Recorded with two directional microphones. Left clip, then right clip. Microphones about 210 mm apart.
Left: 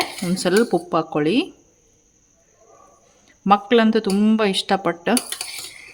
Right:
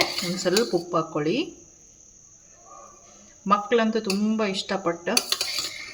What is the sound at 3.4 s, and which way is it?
Speech, 55° left (ahead or behind).